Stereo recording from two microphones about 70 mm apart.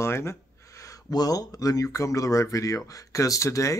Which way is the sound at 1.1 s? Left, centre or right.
Left.